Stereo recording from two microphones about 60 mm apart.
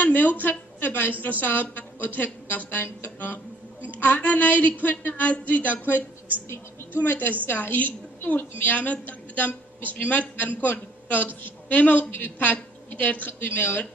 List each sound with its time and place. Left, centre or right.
0.0 s a sound: left
0.4 s a woman's voice: left
7.1 s a woman's voice: left